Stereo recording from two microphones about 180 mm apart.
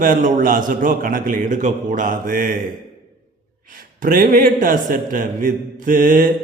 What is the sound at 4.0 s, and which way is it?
A man's voice, 50° right (ahead or behind).